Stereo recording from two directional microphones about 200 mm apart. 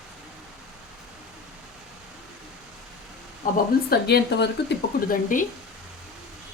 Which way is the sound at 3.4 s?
45° left (ahead or behind).